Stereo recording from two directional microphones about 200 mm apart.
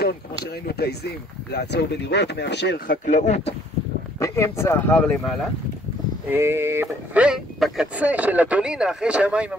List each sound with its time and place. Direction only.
0.7 s speech: 55° left (ahead or behind)
3.1 s speech: 35° left (ahead or behind)
4.2 s speech: 15° left (ahead or behind)
6.2 s speech: 10° right (ahead or behind)